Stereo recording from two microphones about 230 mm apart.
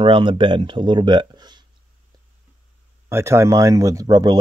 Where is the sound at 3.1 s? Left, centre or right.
Centre.